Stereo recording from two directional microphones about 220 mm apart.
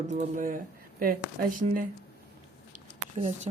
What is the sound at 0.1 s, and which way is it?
Speech, 35° right (ahead or behind).